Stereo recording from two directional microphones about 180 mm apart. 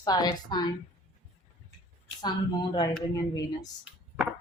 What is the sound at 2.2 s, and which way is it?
Speech, 25° left (ahead or behind).